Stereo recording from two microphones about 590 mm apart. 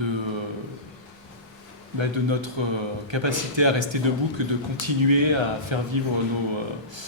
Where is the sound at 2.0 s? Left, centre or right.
Right.